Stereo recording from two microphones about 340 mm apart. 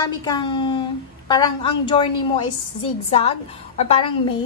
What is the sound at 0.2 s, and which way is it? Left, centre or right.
A woman's voice, centre.